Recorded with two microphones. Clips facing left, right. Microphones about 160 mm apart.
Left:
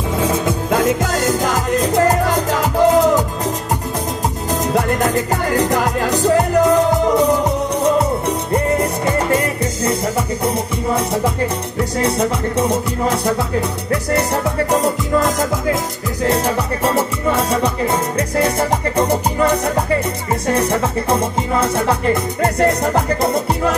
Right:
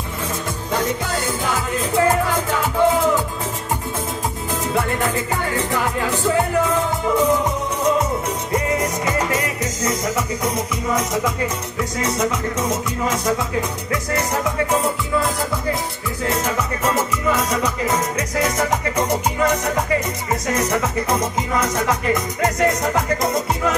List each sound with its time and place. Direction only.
0.2 s music: 65° left (ahead or behind)
1.1 s music: 40° left (ahead or behind)
4.7 s music: 40° left (ahead or behind)
12.0 s music: 35° left (ahead or behind)